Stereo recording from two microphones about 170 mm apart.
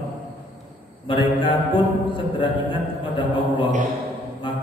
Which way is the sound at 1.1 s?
30° left (ahead or behind).